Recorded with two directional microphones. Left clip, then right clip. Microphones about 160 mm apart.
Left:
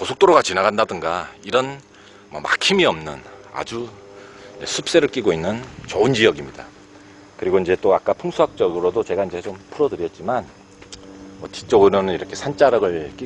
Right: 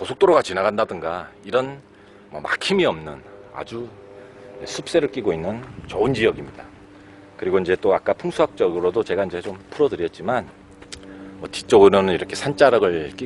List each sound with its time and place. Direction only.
0.0 s a man's voice: 30° left (ahead or behind)
3.6 s speech: 40° left (ahead or behind); by 6.7 s 55° left (ahead or behind)
7.3 s speech: 40° left (ahead or behind)
7.9 s speech: 20° left (ahead or behind); by 10.4 s centre (ahead or behind)
11.4 s a man's voice: 20° right (ahead or behind)